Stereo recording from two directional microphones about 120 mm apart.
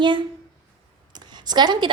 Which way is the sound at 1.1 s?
35° right (ahead or behind).